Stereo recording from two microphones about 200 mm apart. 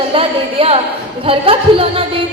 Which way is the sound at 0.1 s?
25° right (ahead or behind).